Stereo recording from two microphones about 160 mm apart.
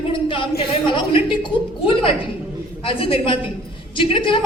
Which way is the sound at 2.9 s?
35° left (ahead or behind).